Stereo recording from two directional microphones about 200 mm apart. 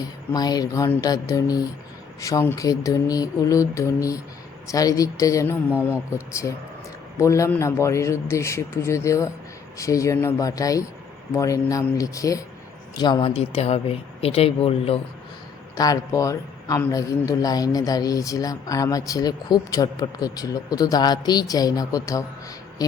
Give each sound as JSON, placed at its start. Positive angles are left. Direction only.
{"t": 0.0, "sound": "a man's voice", "side_deg": 20}
{"t": 15.7, "sound": "a man's voice", "side_deg": 15}